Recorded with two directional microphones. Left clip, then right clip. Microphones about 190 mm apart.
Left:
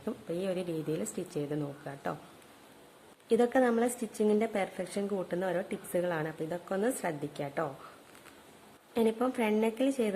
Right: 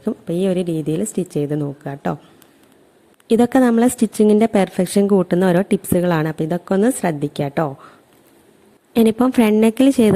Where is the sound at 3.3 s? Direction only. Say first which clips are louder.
Right 11 dB; 50° right (ahead or behind).